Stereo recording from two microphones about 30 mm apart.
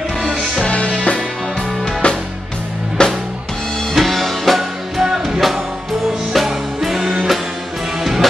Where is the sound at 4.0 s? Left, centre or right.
Centre.